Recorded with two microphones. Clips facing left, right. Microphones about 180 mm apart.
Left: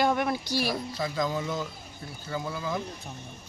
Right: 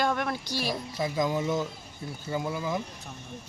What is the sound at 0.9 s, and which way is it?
Speech, 20° right (ahead or behind).